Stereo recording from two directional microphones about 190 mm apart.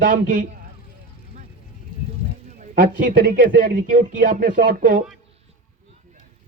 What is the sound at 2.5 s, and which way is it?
A man's voice, 45° right (ahead or behind).